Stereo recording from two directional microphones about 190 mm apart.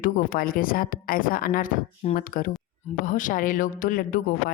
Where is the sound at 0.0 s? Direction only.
50° left (ahead or behind).